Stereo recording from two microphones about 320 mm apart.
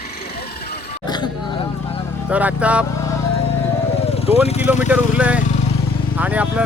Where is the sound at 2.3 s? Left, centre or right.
Centre.